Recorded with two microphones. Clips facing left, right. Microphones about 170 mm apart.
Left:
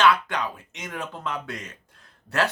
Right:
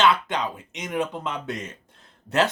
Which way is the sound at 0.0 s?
20° right (ahead or behind).